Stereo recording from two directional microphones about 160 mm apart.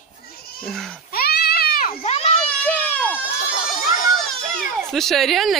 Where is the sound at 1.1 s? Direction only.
75° left (ahead or behind).